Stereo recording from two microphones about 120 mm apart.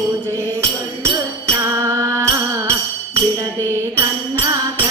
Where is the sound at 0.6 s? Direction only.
20° right (ahead or behind).